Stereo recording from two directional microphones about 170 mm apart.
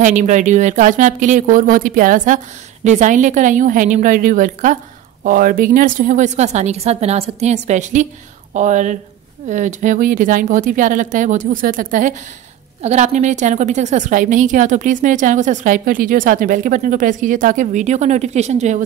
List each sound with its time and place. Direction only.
0.0 s a woman's voice: 45° right (ahead or behind)